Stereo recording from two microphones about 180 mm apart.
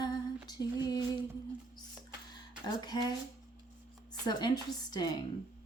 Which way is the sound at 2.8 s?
25° left (ahead or behind).